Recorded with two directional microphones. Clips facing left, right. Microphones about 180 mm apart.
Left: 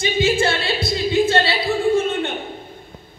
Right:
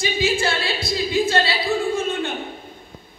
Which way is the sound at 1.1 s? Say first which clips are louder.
Left 3 dB; 25° left (ahead or behind).